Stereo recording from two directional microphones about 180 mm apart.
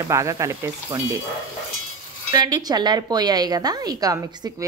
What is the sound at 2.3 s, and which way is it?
A woman's voice, 25° right (ahead or behind).